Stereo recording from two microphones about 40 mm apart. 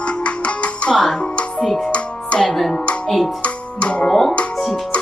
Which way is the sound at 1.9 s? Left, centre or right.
Left.